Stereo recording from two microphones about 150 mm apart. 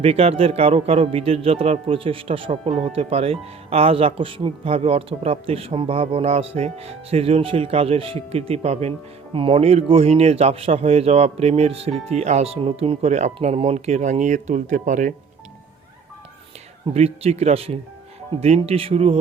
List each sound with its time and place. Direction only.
0.0 s speech: 40° right (ahead or behind)
16.9 s speech: 45° right (ahead or behind)